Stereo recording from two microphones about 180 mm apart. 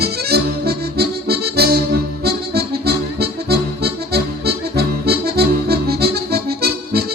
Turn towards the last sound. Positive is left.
turn(degrees=-60)  # may be behind; listen again after turning